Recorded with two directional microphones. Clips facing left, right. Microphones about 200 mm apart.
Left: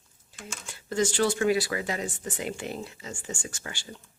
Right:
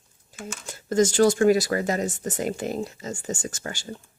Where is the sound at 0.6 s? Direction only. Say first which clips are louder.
Right 6 dB; 45° right (ahead or behind).